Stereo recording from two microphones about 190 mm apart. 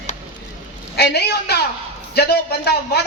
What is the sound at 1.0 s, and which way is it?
A man's voice, 60° left (ahead or behind).